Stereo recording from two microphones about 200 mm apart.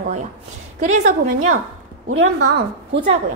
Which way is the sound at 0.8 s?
35° right (ahead or behind).